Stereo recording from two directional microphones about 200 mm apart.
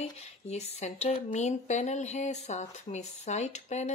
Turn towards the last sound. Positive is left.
turn(degrees=35)  # may be behind; listen again after turning